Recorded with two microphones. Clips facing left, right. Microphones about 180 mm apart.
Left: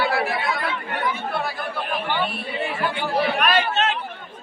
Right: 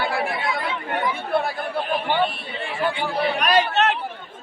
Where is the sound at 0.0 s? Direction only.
50° right (ahead or behind).